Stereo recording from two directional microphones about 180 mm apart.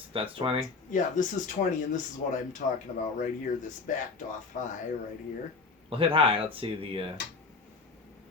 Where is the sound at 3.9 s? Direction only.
45° left (ahead or behind).